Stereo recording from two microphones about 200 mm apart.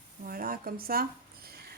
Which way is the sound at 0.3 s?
45° right (ahead or behind).